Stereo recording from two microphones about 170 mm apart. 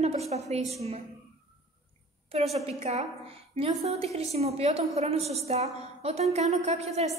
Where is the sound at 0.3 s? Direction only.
40° right (ahead or behind).